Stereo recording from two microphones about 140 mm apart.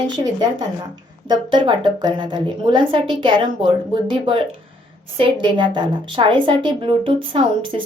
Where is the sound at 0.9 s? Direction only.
30° right (ahead or behind).